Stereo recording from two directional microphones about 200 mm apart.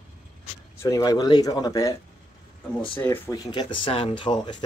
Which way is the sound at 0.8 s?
20° left (ahead or behind).